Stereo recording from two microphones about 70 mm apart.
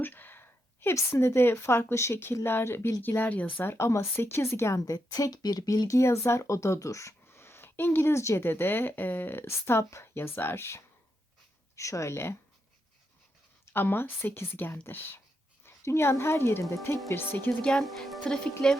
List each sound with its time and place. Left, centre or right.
0.0 s a sound: left
1.1 s speech: left
4.9 s speech: left
6.0 s speech: left
8.4 s speech: left
13.7 s speech: left
17.2 s speech: left
17.6 s speech: centre